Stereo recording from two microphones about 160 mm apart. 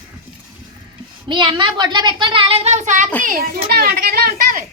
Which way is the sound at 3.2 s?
65° right (ahead or behind).